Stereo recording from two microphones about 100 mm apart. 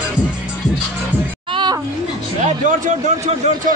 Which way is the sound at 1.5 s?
50° right (ahead or behind).